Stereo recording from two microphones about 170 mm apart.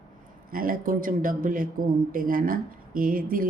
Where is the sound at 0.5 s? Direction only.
55° right (ahead or behind).